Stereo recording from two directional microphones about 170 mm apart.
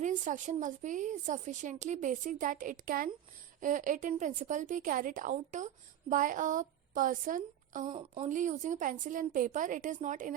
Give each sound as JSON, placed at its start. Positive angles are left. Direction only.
{"t": 0.0, "sound": "a woman's voice", "side_deg": -45}
{"t": 7.9, "sound": "a woman's voice", "side_deg": -30}
{"t": 8.3, "sound": "a woman's voice", "side_deg": -45}